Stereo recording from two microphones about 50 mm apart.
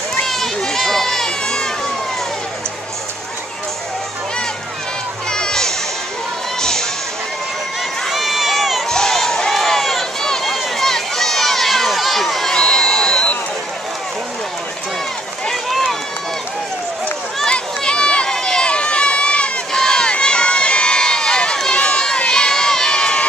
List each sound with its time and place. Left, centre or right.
0.3 s crowd: centre
5.3 s music: centre
6.6 s a sound: centre
8.1 s run: centre
8.8 s run: centre
12.5 s crowd: centre
15.7 s run: centre
17.5 s run: centre
21.8 s crowd: centre